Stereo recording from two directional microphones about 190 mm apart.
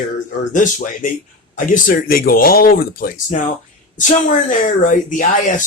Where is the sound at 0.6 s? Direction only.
45° left (ahead or behind).